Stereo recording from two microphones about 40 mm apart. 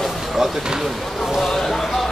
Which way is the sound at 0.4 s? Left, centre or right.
Centre.